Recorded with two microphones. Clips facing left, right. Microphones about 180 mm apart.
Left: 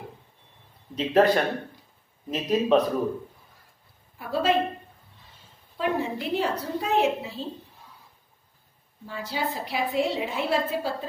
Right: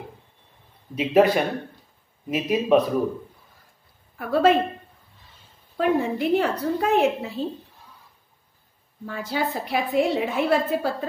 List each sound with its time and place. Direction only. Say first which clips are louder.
0.9 s speech: right 2 dB; 10° right (ahead or behind)
4.2 s a woman's voice: right 6 dB; 55° right (ahead or behind)
5.8 s a woman's voice: right 5 dB; 55° right (ahead or behind)
9.0 s a woman's voice: right 4 dB; 60° right (ahead or behind)